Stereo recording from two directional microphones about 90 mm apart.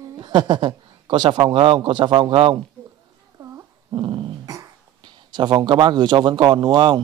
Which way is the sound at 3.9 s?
60° right (ahead or behind).